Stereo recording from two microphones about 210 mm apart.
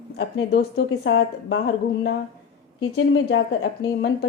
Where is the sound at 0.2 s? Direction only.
50° left (ahead or behind).